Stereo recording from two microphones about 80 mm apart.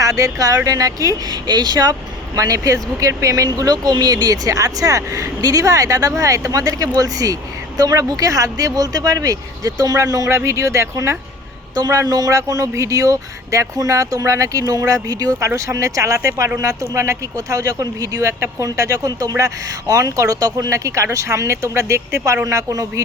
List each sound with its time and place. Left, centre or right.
0.0 s speech: right
10.2 s speech: right
11.9 s speech: right
15.4 s speech: right